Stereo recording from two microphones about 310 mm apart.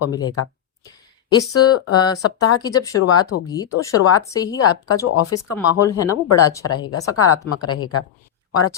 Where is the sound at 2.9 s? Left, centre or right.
Left.